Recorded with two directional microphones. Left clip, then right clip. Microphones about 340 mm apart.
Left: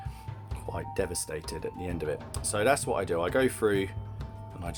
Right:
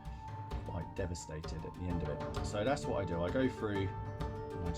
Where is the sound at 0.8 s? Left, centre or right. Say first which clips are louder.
Left 11 dB; centre.